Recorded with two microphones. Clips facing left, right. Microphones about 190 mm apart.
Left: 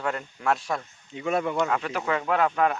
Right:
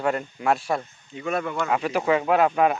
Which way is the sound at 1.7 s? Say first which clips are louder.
Right 5 dB; 15° right (ahead or behind).